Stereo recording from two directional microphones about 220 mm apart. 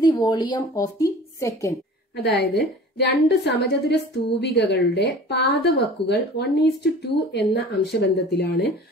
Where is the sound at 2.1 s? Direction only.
50° left (ahead or behind).